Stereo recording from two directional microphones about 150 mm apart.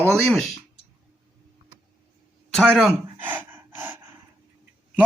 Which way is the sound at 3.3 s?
10° right (ahead or behind).